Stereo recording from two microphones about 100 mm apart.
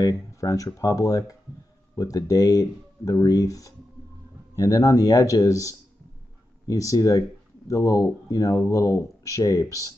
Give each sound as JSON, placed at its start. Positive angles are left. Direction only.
{"t": 0.0, "sound": "speech", "side_deg": 35}